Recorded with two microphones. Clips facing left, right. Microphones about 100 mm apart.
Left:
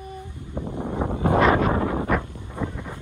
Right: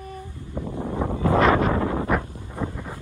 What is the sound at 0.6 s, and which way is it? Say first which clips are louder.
Wind noise: even; 20° left (ahead or behind).